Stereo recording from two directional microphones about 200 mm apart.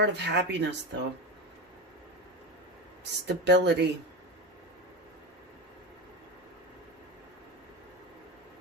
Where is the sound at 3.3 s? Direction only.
60° right (ahead or behind).